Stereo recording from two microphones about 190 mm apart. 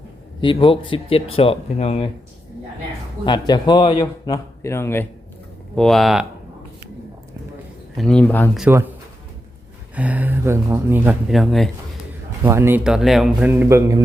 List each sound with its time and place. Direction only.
0.4 s a man's voice: 25° left (ahead or behind)
3.2 s a man's voice: 20° left (ahead or behind)
5.7 s speech: centre (ahead or behind)
7.9 s speech: 5° left (ahead or behind)
8.7 s speech: 10° right (ahead or behind)
9.9 s speech: 10° right (ahead or behind)
12.4 s speech: 15° right (ahead or behind)
13.5 s speech: 15° right (ahead or behind)